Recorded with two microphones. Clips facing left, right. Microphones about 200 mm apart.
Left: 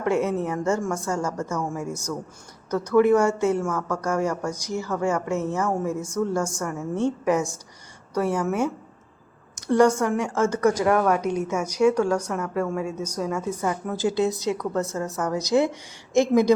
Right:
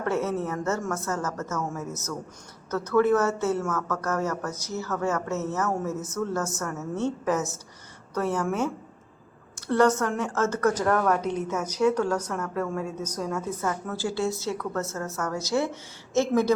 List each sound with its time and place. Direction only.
0.0 s a woman's voice: 15° left (ahead or behind)